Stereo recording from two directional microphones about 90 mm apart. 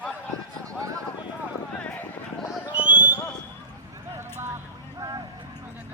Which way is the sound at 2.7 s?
15° right (ahead or behind).